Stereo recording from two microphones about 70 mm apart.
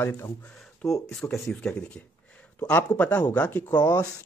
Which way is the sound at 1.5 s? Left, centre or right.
Centre.